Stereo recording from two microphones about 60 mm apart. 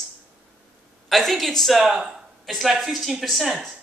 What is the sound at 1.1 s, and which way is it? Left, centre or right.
Speech, centre.